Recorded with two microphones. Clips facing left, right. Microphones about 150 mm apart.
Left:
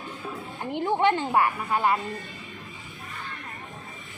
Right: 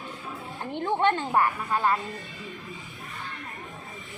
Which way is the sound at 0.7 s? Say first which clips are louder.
Left 2 dB; 10° left (ahead or behind).